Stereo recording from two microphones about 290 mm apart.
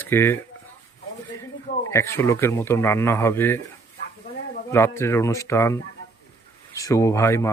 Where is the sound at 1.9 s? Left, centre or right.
Centre.